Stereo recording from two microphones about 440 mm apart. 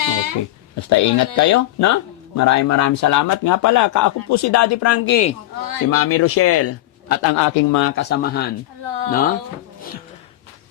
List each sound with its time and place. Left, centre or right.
0.0 s a sound: right
0.8 s a man's voice: left
5.5 s speech: right
5.9 s a man's voice: left
8.8 s speech: right